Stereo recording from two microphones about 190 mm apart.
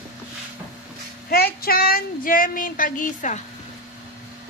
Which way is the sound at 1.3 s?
50° left (ahead or behind).